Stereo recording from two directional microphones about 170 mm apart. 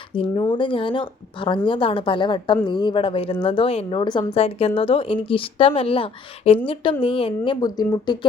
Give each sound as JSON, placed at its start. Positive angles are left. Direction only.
{"t": 0.1, "sound": "a woman's voice", "side_deg": 30}